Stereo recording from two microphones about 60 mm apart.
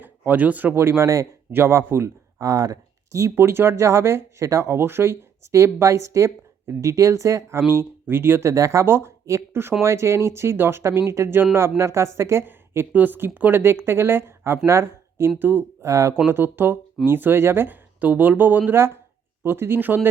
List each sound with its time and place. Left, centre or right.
0.0 s speech: right
0.7 s speech: right
1.5 s speech: right
2.4 s speech: right
3.3 s speech: right
8.0 s speech: right
12.5 s a sound: right
12.9 s speech: right
15.4 s speech: right
15.8 s speech: right
16.3 s speech: right